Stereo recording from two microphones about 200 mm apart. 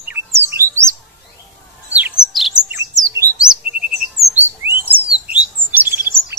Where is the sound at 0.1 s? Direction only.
10° right (ahead or behind).